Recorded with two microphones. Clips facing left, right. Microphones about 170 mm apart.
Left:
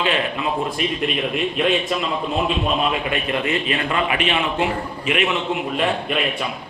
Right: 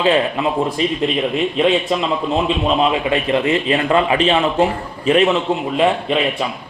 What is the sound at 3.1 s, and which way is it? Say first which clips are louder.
Speech: right 6 dB; 25° right (ahead or behind).